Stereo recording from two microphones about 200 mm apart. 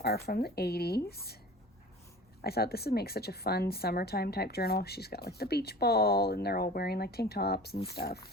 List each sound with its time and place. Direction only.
0.0 s a woman's voice: 50° left (ahead or behind)
2.4 s a woman's voice: 50° left (ahead or behind)